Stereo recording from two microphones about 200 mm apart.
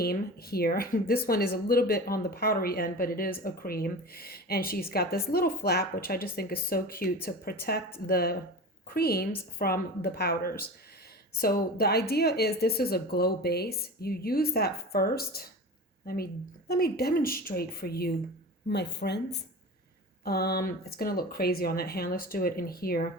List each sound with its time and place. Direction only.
0.0 s speech: 50° left (ahead or behind)